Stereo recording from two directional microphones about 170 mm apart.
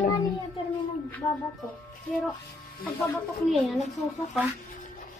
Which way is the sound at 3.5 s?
Centre (ahead or behind).